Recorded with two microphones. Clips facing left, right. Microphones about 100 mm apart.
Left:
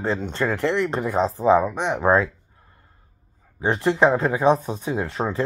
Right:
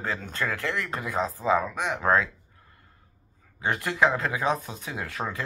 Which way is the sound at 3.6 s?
30° left (ahead or behind).